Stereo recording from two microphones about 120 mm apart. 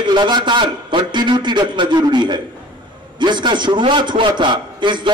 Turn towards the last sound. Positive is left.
turn(degrees=-40)  # may be behind; listen again after turning